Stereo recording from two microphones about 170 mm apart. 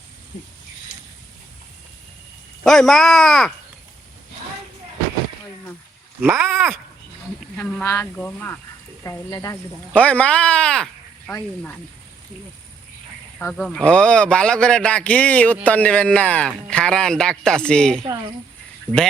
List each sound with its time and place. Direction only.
2.6 s a man's voice: centre (ahead or behind)
6.3 s a man's voice: centre (ahead or behind)
9.0 s speech: 20° left (ahead or behind)
9.9 s a man's voice: 10° left (ahead or behind)
13.4 s a man's voice: 5° left (ahead or behind)